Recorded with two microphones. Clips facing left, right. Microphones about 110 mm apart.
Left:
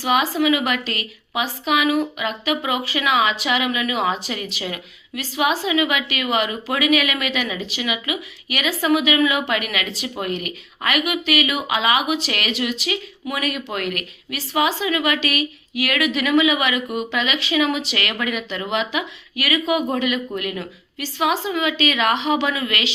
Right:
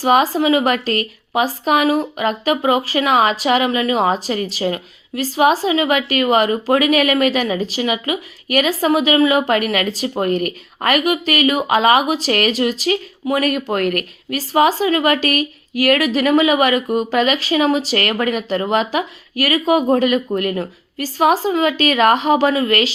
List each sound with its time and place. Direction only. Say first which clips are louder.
0.0 s a woman's voice: right 5 dB; 40° right (ahead or behind)